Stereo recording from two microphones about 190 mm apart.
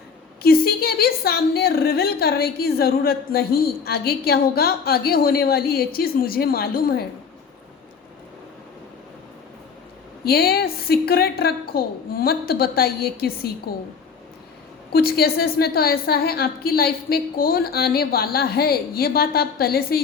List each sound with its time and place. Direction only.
0.4 s a woman's voice: 55° left (ahead or behind)
10.2 s a woman's voice: 55° left (ahead or behind)
14.9 s a woman's voice: 55° left (ahead or behind)